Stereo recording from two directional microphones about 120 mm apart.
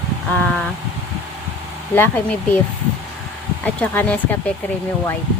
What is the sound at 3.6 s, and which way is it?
Speech, 10° left (ahead or behind).